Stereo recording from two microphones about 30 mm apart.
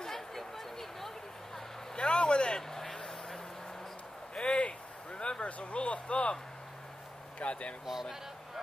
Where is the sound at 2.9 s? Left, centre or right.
Left.